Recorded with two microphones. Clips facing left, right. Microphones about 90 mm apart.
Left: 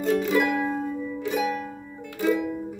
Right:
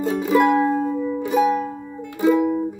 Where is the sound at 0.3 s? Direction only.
35° right (ahead or behind).